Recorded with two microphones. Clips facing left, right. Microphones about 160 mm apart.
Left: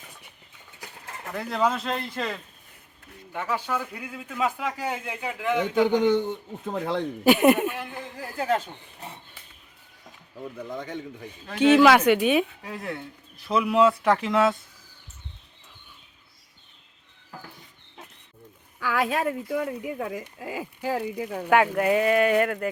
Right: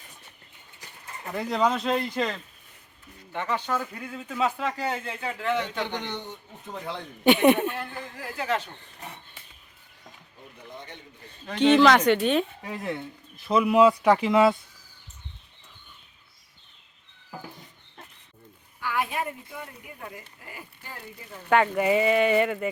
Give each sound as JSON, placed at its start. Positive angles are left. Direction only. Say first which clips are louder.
{"t": 1.3, "sound": "speech", "louder": "right 1 dB", "side_deg": 0}
{"t": 7.3, "sound": "speech", "louder": "even", "side_deg": 5}
{"t": 8.4, "sound": "speech", "louder": "left 3 dB", "side_deg": 40}
{"t": 10.4, "sound": "speech", "louder": "left 9 dB", "side_deg": 90}
{"t": 11.4, "sound": "speech", "louder": "left 1 dB", "side_deg": 5}
{"t": 17.3, "sound": "a sound", "louder": "right 3 dB", "side_deg": -5}
{"t": 18.9, "sound": "speech", "louder": "left 4 dB", "side_deg": 90}
{"t": 21.5, "sound": "speech", "louder": "left 1 dB", "side_deg": 5}